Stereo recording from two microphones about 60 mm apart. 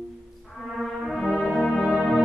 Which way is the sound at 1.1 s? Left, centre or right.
Centre.